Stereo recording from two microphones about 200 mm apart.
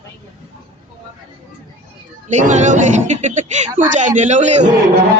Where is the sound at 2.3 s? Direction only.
35° right (ahead or behind).